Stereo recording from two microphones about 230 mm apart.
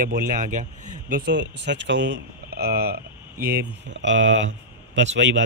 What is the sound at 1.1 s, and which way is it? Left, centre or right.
A man's voice, right.